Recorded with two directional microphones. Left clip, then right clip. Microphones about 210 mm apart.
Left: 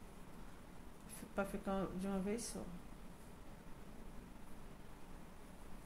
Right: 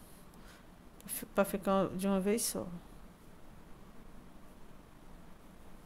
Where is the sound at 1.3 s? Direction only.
55° right (ahead or behind).